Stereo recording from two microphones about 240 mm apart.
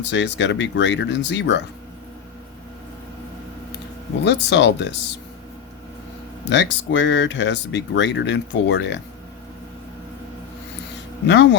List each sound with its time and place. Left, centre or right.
0.0 s speech: left
4.2 s speech: left
6.4 s speech: left